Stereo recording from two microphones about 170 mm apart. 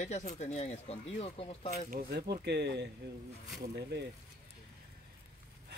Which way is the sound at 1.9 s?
70° right (ahead or behind).